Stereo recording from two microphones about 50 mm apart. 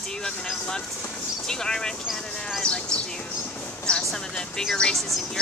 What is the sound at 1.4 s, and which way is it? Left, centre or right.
Speech, centre.